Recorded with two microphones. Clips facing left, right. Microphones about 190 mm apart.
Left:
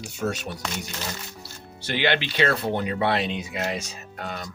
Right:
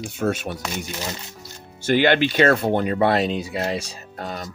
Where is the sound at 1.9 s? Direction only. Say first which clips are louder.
Right 7 dB; 45° right (ahead or behind).